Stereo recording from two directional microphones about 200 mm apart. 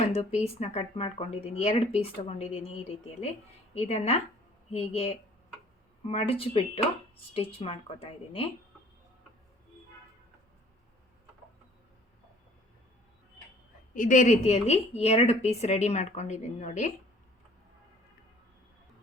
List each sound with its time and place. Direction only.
0.1 s a woman's voice: 30° left (ahead or behind)
13.9 s speech: 40° left (ahead or behind)